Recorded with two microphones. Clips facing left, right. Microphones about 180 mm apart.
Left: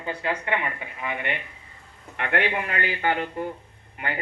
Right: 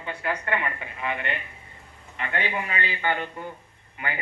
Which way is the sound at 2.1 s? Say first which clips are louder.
Left 4 dB; 65° left (ahead or behind).